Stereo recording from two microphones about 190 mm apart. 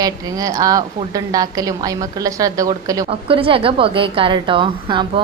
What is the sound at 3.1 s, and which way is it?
A woman's voice, 30° right (ahead or behind).